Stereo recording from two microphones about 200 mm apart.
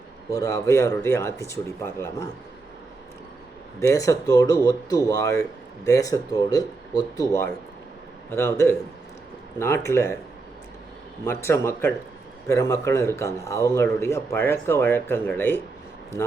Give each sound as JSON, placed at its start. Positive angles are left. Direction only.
{"t": 0.3, "sound": "speech", "side_deg": 15}
{"t": 3.8, "sound": "speech", "side_deg": 15}
{"t": 11.3, "sound": "speech", "side_deg": 15}